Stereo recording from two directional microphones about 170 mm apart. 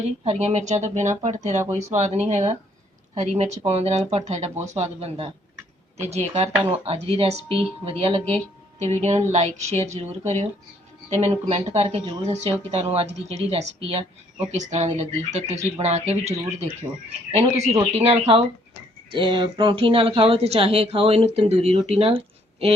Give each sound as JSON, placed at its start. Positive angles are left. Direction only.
{"t": 0.0, "sound": "speech", "side_deg": -40}